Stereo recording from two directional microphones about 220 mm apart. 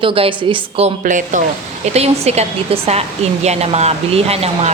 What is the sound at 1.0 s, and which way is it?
A woman's voice, 35° right (ahead or behind).